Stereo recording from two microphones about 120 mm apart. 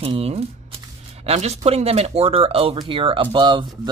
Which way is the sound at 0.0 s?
55° right (ahead or behind).